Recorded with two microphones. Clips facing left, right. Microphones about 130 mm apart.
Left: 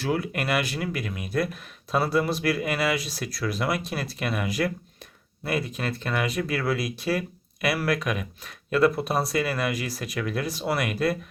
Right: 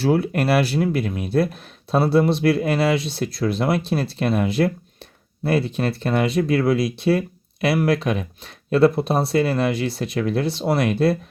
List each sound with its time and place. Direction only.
0.0 s speech: 30° right (ahead or behind)